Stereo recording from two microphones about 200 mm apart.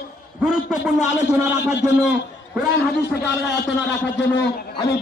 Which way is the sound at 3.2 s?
60° left (ahead or behind).